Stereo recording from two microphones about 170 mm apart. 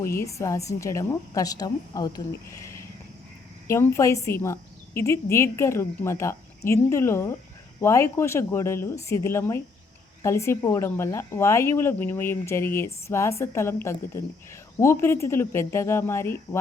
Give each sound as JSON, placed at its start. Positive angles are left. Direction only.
{"t": 0.2, "sound": "speech", "side_deg": 20}